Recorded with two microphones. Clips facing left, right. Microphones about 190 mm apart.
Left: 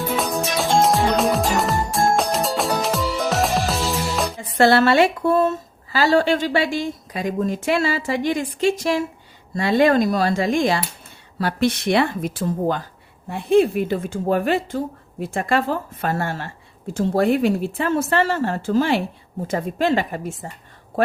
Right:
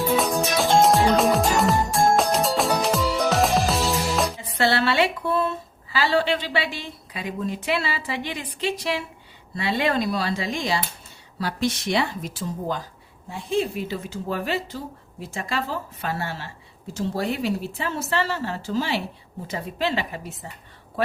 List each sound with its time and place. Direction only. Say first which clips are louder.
0.2 s music: even; centre (ahead or behind)
4.4 s a woman's voice: left 7 dB; 50° left (ahead or behind)